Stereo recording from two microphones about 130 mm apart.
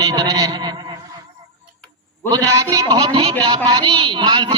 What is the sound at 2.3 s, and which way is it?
A man's voice, 30° right (ahead or behind).